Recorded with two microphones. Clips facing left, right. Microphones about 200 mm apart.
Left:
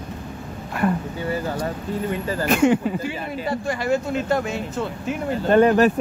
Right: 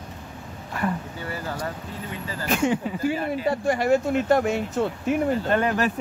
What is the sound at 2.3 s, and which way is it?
Speech, 60° left (ahead or behind).